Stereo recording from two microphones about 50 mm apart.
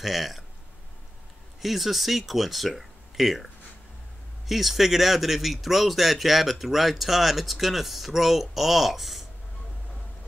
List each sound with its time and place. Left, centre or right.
0.0 s speech: centre
1.6 s speech: centre